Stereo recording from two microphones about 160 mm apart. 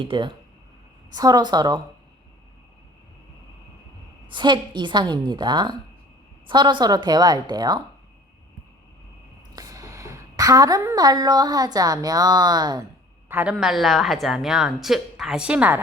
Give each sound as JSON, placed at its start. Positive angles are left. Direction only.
{"t": 0.0, "sound": "a woman's voice", "side_deg": -30}
{"t": 4.3, "sound": "a woman's voice", "side_deg": -30}
{"t": 9.6, "sound": "a woman's voice", "side_deg": -20}
{"t": 13.2, "sound": "speech", "side_deg": -10}